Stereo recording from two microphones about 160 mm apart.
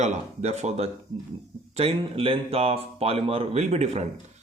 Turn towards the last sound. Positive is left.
turn(degrees=-40)  # may be behind; listen again after turning